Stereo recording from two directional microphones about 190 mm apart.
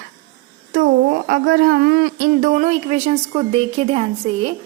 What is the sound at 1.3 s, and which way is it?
Speech, 55° right (ahead or behind).